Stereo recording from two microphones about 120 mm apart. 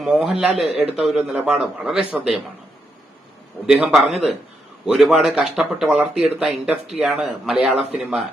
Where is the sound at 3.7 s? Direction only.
5° right (ahead or behind).